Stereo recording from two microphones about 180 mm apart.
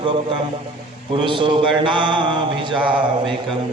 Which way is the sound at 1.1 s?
25° right (ahead or behind).